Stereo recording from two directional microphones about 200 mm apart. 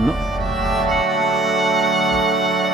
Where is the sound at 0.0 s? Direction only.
Centre (ahead or behind).